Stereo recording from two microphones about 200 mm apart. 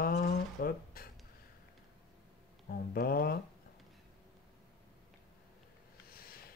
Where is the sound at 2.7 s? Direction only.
50° left (ahead or behind).